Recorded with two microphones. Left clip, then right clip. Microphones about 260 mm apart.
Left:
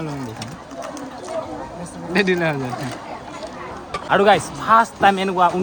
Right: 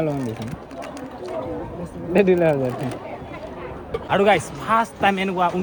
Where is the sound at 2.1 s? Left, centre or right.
Centre.